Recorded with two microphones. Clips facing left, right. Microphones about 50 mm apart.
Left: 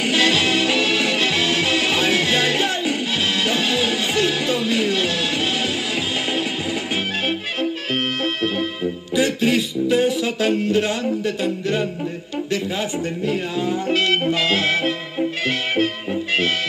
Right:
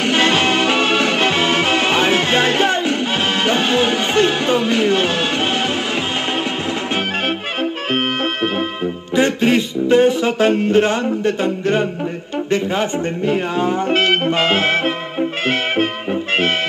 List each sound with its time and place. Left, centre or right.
0.0 s music: right
7.9 s music: right
9.1 s speech: right
15.4 s music: right